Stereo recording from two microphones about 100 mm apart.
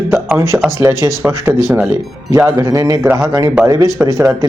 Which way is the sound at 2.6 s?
35° right (ahead or behind).